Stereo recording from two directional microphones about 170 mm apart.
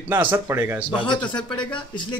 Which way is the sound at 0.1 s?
10° right (ahead or behind).